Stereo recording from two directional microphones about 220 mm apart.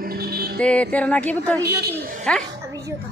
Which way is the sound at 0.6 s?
5° left (ahead or behind).